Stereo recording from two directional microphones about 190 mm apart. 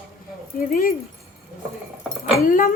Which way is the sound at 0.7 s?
50° left (ahead or behind).